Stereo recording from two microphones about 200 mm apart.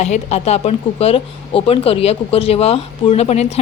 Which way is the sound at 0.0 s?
35° left (ahead or behind).